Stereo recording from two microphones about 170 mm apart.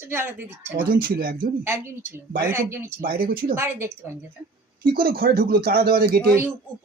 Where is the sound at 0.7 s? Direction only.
55° right (ahead or behind).